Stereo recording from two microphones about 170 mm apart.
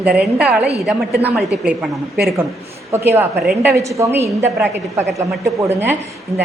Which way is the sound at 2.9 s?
15° right (ahead or behind).